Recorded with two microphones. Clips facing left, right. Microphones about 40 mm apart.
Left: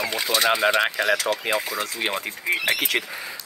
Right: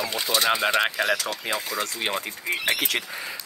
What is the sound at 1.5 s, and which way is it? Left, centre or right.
Speech, left.